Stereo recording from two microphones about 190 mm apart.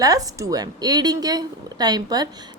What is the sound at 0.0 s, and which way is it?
A woman's voice, 20° right (ahead or behind).